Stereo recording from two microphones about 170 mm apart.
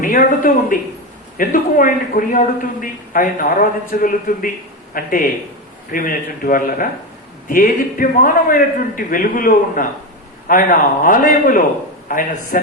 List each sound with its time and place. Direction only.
0.0 s a man's voice: 55° left (ahead or behind)